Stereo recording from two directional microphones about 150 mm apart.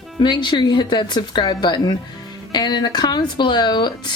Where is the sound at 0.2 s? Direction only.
30° left (ahead or behind).